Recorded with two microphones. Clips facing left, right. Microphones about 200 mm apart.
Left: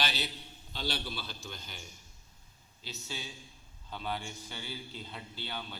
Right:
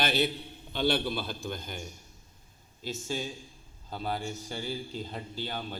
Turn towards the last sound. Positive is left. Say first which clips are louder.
# right 6 dB
turn(degrees=-45)  # may be behind; listen again after turning